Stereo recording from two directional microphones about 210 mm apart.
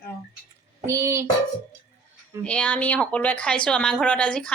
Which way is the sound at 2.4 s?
5° left (ahead or behind).